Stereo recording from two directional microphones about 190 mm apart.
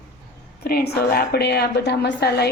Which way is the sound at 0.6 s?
55° left (ahead or behind).